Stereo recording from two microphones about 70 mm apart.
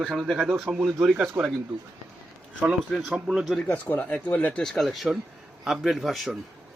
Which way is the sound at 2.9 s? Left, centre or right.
Centre.